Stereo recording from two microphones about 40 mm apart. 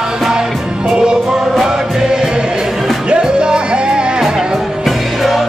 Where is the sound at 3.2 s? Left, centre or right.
Right.